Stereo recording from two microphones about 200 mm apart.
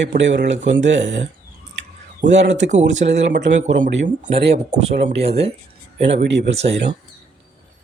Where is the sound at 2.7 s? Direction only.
35° right (ahead or behind).